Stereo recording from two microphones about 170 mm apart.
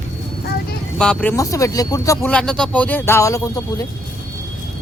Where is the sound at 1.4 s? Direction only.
20° left (ahead or behind).